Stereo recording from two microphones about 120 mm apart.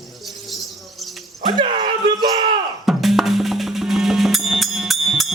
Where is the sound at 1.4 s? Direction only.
45° right (ahead or behind).